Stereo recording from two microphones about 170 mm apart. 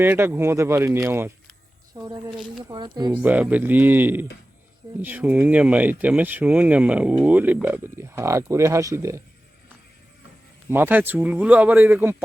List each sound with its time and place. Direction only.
0.0 s speech: 15° right (ahead or behind)
3.2 s speech: 10° right (ahead or behind)
10.7 s speech: 10° right (ahead or behind)